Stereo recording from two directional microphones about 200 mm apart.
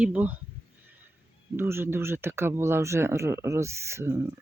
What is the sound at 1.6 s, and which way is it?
Speech, 10° right (ahead or behind).